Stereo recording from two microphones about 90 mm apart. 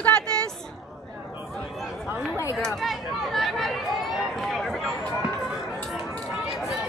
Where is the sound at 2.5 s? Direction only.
5° left (ahead or behind).